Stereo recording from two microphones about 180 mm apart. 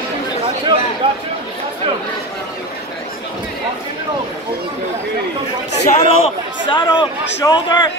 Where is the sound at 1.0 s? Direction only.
30° right (ahead or behind).